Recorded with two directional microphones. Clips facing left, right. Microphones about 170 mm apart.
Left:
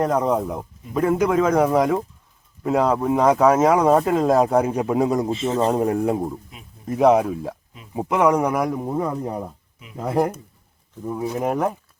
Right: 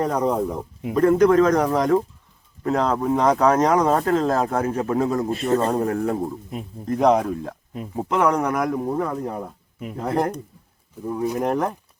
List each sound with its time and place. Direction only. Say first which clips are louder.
0.0 s speech: left 1 dB; centre (ahead or behind)
6.8 s speech: left 2 dB; 5° left (ahead or behind)
10.0 s speech: left 2 dB; 5° left (ahead or behind)